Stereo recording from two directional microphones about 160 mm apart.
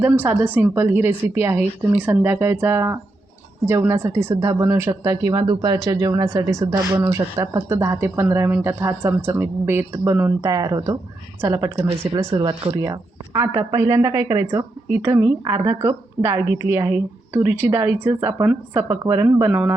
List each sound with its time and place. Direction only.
0.0 s a woman's voice: 10° right (ahead or behind)
12.3 s speech: 35° right (ahead or behind)
12.7 s speech: 20° right (ahead or behind)